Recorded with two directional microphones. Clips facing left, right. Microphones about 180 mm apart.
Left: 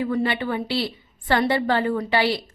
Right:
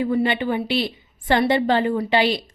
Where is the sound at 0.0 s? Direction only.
20° right (ahead or behind).